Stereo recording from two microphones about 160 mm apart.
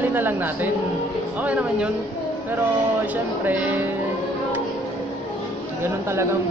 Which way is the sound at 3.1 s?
10° right (ahead or behind).